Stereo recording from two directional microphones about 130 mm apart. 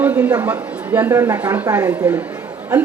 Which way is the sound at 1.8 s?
30° right (ahead or behind).